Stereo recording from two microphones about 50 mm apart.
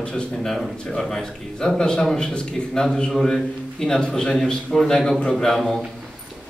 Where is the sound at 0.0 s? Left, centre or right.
Centre.